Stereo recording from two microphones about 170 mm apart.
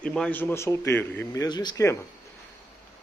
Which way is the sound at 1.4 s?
25° left (ahead or behind).